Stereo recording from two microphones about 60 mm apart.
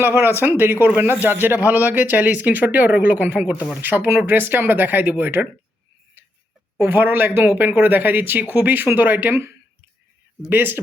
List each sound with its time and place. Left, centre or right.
0.0 s speech: right
6.8 s speech: right
10.5 s speech: right